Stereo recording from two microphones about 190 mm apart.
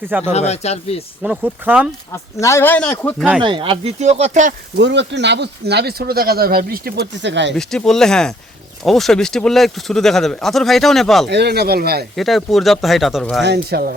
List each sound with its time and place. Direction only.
0.3 s speech: 35° left (ahead or behind)
1.2 s speech: 5° right (ahead or behind)
2.1 s speech: 15° left (ahead or behind)
3.4 s speech: 25° right (ahead or behind)
4.8 s speech: 70° right (ahead or behind)
7.5 s speech: 5° left (ahead or behind)
11.3 s speech: 60° right (ahead or behind)
12.1 s speech: centre (ahead or behind)
13.4 s speech: 60° right (ahead or behind)